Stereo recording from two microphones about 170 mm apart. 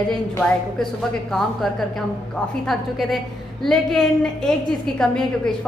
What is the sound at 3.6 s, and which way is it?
A woman's voice, 5° left (ahead or behind).